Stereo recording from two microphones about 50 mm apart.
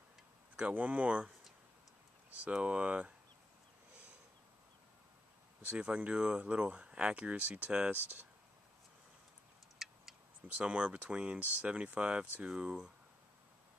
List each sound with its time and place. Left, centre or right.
0.6 s speech: right
2.6 s speech: right
5.7 s speech: right
9.8 s tick-tock: centre
10.6 s speech: right